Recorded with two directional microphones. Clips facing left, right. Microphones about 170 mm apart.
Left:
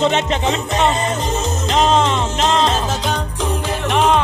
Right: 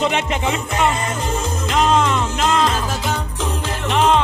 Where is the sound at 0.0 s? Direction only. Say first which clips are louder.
Left 3 dB; 25° left (ahead or behind).